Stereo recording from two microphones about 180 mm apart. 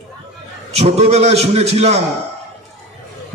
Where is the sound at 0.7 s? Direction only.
35° right (ahead or behind).